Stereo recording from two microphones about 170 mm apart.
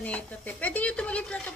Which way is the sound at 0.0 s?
10° left (ahead or behind).